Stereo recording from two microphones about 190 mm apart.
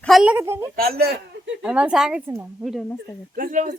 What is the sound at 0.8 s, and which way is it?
Speech, 55° right (ahead or behind).